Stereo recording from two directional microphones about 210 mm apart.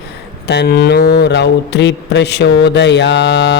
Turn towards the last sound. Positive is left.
turn(degrees=55)  # may be behind; listen again after turning